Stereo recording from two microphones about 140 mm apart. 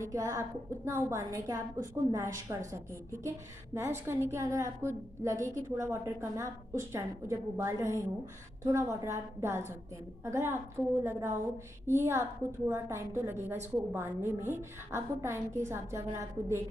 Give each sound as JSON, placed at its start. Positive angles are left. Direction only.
{"t": 0.0, "sound": "a woman's voice", "side_deg": -20}